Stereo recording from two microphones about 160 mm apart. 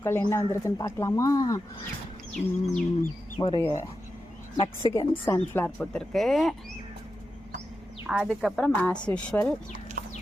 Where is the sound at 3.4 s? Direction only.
25° left (ahead or behind).